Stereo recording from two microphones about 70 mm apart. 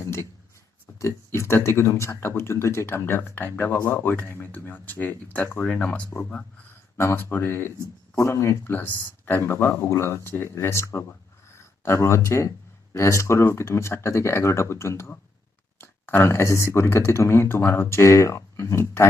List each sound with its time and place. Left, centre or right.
0.0 s a sound: left
0.9 s speech: left; by 6.1 s centre
6.9 s speech: left
8.2 s speech: left
8.7 s speech: left
9.4 s speech: left